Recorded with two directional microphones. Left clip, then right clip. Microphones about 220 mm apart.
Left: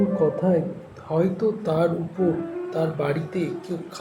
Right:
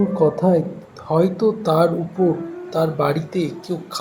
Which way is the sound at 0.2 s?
20° right (ahead or behind).